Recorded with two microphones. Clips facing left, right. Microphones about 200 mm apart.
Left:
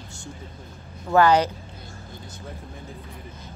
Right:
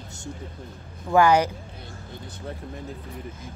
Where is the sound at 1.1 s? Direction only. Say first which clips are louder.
Even; 10° right (ahead or behind).